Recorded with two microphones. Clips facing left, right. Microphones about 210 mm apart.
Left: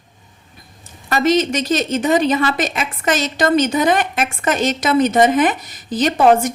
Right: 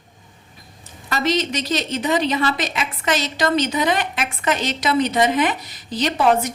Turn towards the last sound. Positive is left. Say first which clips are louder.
# left 5 dB
turn(degrees=50)  # may be behind; listen again after turning